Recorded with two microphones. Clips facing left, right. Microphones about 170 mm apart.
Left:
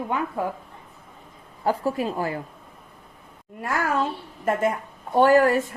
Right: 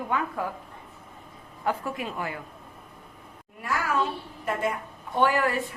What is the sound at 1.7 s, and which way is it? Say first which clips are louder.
Speech: left 6 dB; 35° left (ahead or behind).